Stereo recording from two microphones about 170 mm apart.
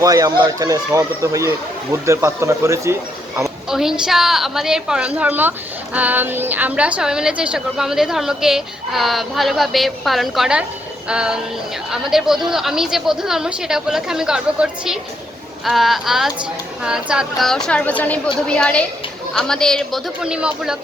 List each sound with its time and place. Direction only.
0.0 s speech: 20° right (ahead or behind)
3.7 s a woman's voice: 5° right (ahead or behind)